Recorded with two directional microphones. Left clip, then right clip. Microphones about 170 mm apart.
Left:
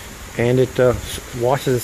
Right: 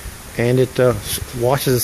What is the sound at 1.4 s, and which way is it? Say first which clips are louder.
Speech: right 1 dB; 20° right (ahead or behind).